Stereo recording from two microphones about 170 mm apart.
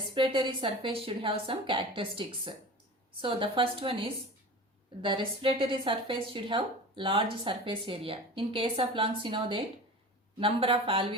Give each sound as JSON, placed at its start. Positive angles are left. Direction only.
{"t": 0.1, "sound": "a woman's voice", "side_deg": -30}